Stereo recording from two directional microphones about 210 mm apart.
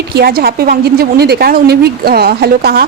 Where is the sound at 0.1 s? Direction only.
50° right (ahead or behind).